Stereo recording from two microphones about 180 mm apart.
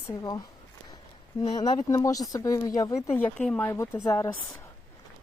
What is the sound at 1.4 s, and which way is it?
Speech, 35° left (ahead or behind).